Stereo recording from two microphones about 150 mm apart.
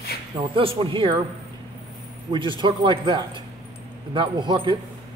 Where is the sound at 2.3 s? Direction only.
30° right (ahead or behind).